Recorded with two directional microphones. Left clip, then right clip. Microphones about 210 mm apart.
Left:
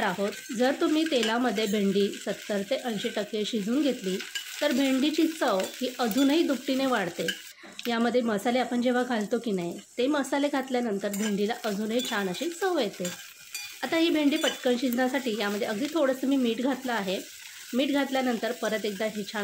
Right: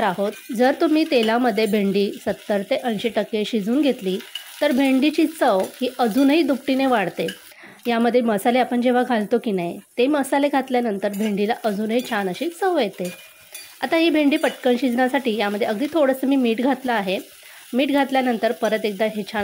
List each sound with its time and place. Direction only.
0.0 s speech: 30° right (ahead or behind)